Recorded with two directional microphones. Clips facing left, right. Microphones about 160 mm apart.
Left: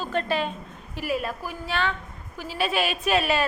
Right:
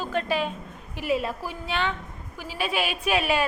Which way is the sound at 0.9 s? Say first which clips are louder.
Right 2 dB; 25° right (ahead or behind).